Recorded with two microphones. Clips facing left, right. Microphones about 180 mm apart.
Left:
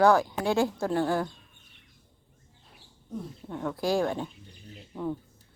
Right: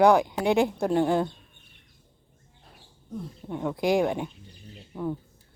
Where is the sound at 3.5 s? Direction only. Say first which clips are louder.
Right 3 dB; 15° right (ahead or behind).